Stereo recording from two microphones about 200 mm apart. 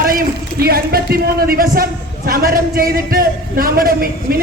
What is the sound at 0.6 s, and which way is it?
A man's voice, 50° right (ahead or behind).